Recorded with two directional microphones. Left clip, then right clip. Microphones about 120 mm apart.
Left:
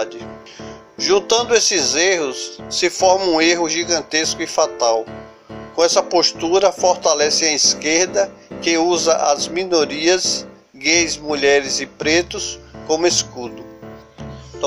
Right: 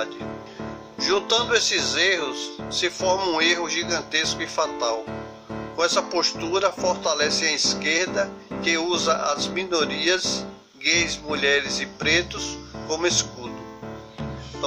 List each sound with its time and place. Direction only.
0.9 s speech: 35° left (ahead or behind)